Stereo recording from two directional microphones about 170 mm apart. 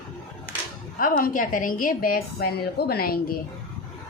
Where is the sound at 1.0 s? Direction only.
55° left (ahead or behind).